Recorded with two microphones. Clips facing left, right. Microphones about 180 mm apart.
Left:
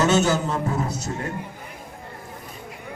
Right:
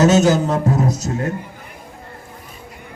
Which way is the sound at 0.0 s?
40° right (ahead or behind).